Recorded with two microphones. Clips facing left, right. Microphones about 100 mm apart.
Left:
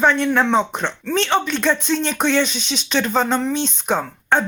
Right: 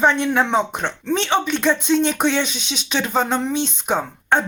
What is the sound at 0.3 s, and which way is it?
Speech, 10° right (ahead or behind).